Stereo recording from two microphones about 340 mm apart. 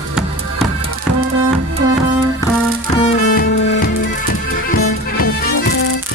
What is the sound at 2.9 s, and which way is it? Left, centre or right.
Music, left.